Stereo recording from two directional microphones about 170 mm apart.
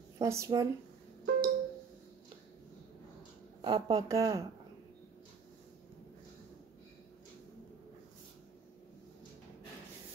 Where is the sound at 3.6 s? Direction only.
25° right (ahead or behind).